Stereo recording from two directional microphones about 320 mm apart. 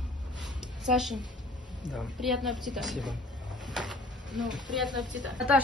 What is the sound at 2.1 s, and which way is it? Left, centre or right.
Speech, centre.